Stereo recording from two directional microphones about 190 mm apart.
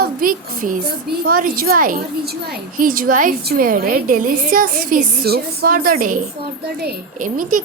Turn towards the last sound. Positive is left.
turn(degrees=-45)  # may be behind; listen again after turning